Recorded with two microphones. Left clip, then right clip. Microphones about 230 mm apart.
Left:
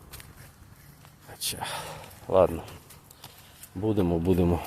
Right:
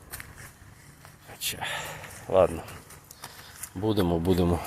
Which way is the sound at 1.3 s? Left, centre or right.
Centre.